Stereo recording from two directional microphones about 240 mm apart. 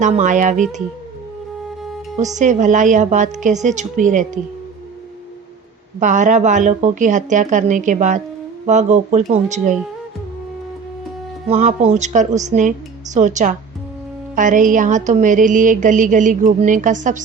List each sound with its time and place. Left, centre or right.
0.0 s a woman's voice: right
2.3 s a woman's voice: right
6.0 s a woman's voice: right
11.4 s a woman's voice: right